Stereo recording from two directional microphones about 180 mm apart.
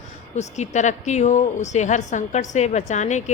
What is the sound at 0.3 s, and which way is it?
A woman's voice, 40° left (ahead or behind).